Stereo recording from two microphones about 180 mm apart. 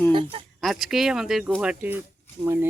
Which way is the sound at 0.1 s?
25° right (ahead or behind).